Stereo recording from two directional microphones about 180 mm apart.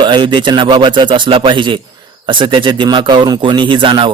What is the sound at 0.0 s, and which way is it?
A man's voice, 25° right (ahead or behind).